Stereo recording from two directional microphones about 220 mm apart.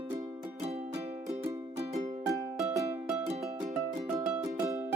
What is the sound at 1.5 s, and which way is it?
Music, 15° right (ahead or behind).